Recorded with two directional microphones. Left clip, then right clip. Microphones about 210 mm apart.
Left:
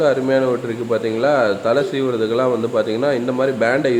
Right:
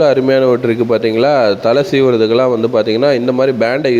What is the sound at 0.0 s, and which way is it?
A man's voice, 35° right (ahead or behind).